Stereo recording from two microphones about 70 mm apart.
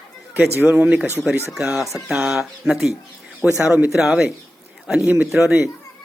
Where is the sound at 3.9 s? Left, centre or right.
Centre.